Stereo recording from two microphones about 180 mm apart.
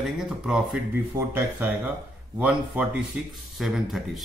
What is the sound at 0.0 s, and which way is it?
Speech, 5° right (ahead or behind).